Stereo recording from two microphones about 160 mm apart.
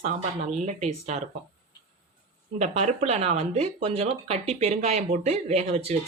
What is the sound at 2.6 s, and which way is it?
Speech, 45° right (ahead or behind).